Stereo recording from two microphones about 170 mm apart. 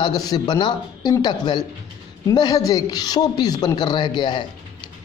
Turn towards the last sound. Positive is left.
turn(degrees=25)  # may be behind; listen again after turning